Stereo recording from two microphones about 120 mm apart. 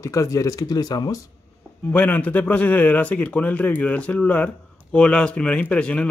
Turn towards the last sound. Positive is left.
turn(degrees=10)  # may be behind; listen again after turning